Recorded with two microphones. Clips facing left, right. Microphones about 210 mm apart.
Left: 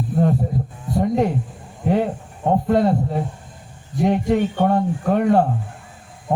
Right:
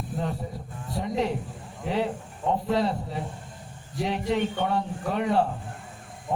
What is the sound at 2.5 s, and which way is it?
A man's voice, 50° left (ahead or behind).